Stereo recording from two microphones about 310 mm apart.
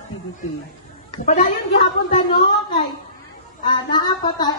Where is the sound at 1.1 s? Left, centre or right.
Left.